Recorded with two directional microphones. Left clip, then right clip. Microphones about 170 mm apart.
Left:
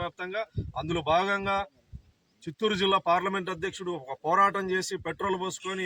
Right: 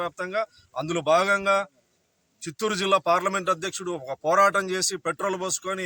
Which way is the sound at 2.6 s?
30° right (ahead or behind).